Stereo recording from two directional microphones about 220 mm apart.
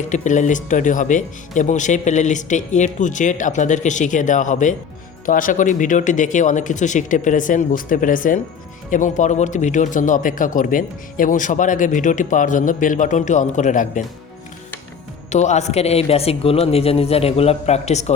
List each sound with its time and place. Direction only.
0.1 s speech: 35° left (ahead or behind)
15.3 s a man's voice: 30° left (ahead or behind)